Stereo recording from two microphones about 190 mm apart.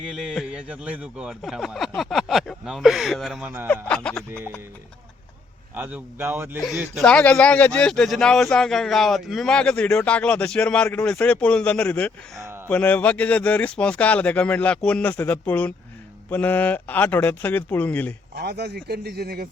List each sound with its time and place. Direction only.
0.1 s speech: 5° right (ahead or behind)
5.7 s speech: 10° right (ahead or behind)
6.6 s speech: centre (ahead or behind)
18.3 s speech: 60° right (ahead or behind)